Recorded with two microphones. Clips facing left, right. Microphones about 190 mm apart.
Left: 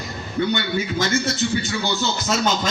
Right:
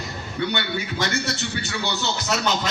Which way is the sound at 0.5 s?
65° right (ahead or behind).